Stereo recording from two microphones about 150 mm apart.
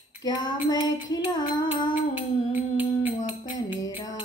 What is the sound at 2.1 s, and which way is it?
Music, 10° right (ahead or behind).